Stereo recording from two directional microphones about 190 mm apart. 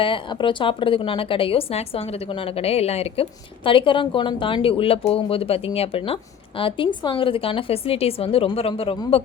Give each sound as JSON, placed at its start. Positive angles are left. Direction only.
{"t": 0.0, "sound": "speech", "side_deg": 25}